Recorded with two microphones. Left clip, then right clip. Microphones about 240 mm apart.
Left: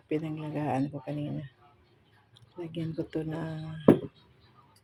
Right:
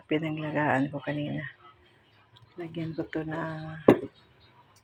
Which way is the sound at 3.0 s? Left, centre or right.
Centre.